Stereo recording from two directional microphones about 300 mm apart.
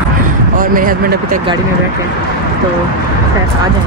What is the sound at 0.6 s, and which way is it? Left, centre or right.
Speech, right.